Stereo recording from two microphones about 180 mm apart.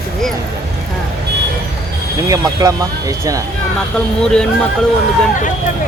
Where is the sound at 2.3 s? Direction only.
20° right (ahead or behind).